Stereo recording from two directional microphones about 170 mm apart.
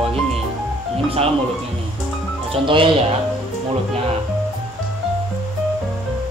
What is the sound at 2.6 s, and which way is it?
Speech, 30° right (ahead or behind).